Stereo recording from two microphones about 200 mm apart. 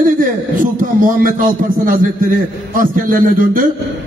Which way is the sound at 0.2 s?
45° right (ahead or behind).